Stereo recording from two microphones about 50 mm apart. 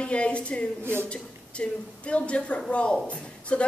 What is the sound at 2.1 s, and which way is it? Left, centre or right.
Speech, left.